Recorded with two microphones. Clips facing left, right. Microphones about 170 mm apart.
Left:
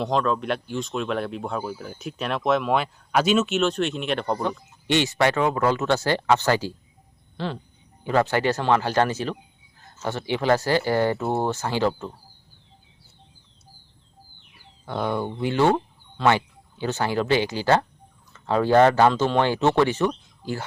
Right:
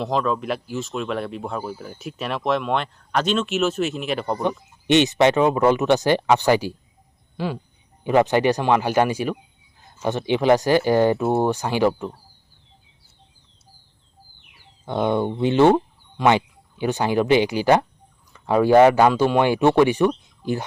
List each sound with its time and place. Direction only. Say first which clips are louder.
0.0 s speech: right 1 dB; centre (ahead or behind)
4.9 s speech: right 5 dB; 20° right (ahead or behind)
14.8 s speech: right 5 dB; 20° right (ahead or behind)